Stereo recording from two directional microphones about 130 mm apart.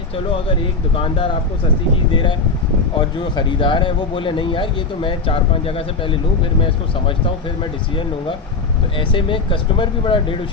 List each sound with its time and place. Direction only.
0.9 s speech: 45° left (ahead or behind)
3.3 s speech: 40° left (ahead or behind)
9.0 s speech: 40° left (ahead or behind)